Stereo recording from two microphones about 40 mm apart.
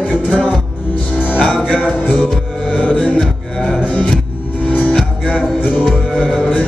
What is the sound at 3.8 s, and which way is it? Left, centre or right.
Music, left.